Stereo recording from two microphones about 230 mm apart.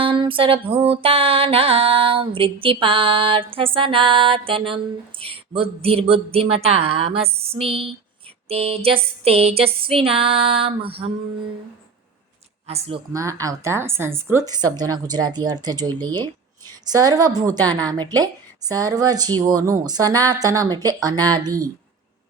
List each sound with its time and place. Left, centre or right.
0.0 s a sound: right
12.6 s speech: right
13.1 s a woman's voice: centre